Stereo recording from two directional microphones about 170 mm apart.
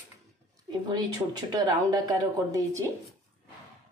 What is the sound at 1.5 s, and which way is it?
A woman's voice, 25° right (ahead or behind).